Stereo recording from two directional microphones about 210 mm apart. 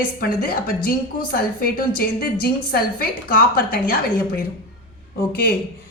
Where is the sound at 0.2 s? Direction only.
45° left (ahead or behind).